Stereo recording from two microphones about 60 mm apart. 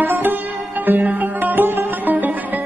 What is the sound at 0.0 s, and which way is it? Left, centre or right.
Sitar, right.